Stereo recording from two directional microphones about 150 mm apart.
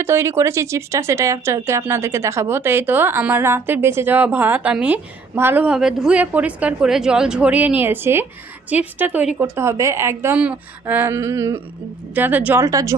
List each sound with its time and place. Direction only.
0.0 s a woman's voice: 15° right (ahead or behind)